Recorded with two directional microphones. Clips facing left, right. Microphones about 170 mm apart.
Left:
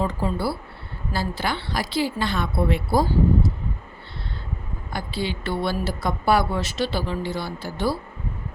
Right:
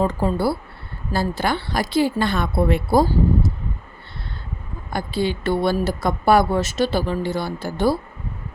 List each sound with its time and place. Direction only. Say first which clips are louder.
0.0 s a woman's voice: right 5 dB; 45° right (ahead or behind)
4.9 s a woman's voice: right 5 dB; 50° right (ahead or behind)